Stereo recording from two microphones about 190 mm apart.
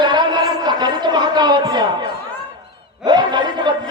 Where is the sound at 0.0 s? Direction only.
25° right (ahead or behind).